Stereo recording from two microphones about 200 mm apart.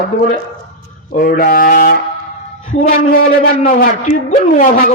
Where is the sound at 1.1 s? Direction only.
45° left (ahead or behind).